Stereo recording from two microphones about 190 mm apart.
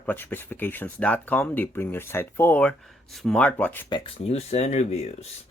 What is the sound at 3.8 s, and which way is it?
Speech, 25° left (ahead or behind).